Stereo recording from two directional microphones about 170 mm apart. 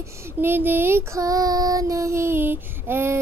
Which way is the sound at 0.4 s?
10° right (ahead or behind).